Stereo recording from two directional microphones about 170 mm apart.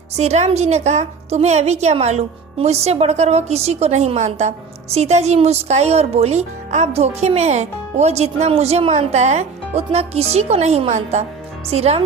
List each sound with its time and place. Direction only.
0.2 s a woman's voice: 40° right (ahead or behind)